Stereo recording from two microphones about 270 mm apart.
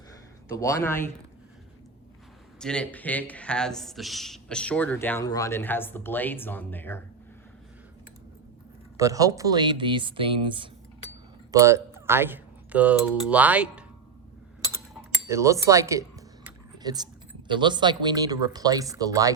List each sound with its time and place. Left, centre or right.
0.4 s speech: centre
2.6 s speech: centre
9.0 s speech: centre
15.3 s speech: centre
16.7 s typing: centre
17.5 s speech: centre